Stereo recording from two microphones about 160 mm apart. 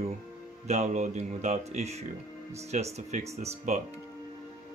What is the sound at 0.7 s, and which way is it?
Speech, 45° right (ahead or behind).